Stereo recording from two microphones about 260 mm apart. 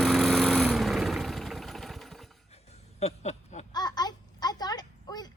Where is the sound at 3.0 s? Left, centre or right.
Left.